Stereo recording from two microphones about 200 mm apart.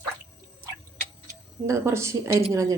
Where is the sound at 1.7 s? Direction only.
15° right (ahead or behind).